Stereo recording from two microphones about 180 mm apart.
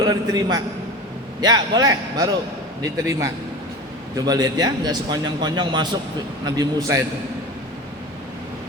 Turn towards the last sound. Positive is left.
turn(degrees=-20)  # may be behind; listen again after turning